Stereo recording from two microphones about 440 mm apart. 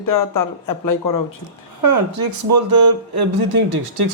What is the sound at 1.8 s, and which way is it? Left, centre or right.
Speech, right.